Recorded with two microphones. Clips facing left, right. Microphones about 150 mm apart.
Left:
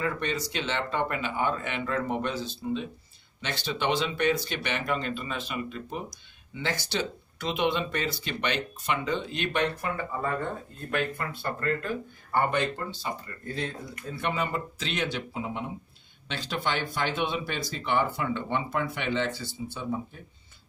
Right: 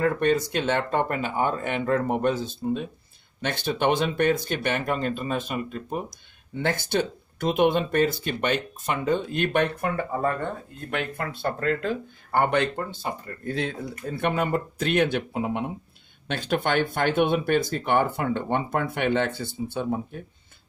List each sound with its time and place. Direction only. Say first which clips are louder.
0.0 s speech: right 8 dB; 50° right (ahead or behind)
10.9 s speech: right 1 dB; 70° right (ahead or behind)